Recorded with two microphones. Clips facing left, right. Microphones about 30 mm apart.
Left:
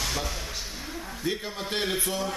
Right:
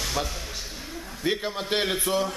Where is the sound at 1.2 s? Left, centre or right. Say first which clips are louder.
Right 5 dB; right.